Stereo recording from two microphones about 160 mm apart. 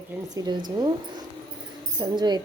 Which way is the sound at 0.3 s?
25° right (ahead or behind).